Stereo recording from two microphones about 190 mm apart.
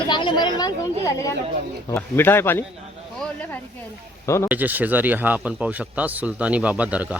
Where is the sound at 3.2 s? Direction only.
10° left (ahead or behind).